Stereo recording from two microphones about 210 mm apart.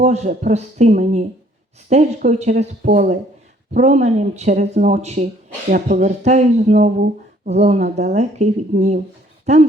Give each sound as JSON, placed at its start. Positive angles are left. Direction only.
{"t": 0.0, "sound": "speech", "side_deg": -30}